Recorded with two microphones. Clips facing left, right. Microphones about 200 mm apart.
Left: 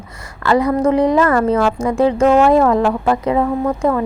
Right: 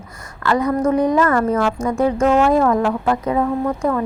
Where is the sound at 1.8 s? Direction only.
10° left (ahead or behind).